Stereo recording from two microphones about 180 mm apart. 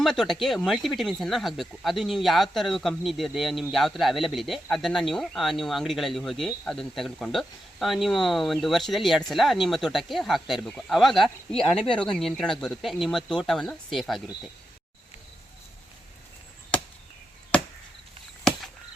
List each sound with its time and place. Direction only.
0.0 s speech: centre (ahead or behind)